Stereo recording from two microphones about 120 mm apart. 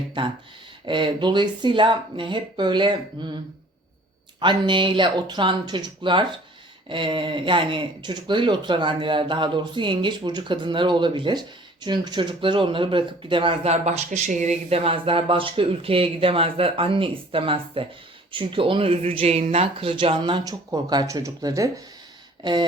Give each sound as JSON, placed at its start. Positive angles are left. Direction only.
{"t": 0.2, "sound": "speech", "side_deg": -40}
{"t": 4.4, "sound": "speech", "side_deg": -40}
{"t": 13.7, "sound": "speech", "side_deg": -65}
{"t": 14.7, "sound": "speech", "side_deg": -55}